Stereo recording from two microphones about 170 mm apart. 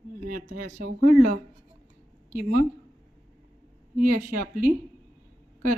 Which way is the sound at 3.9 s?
55° right (ahead or behind).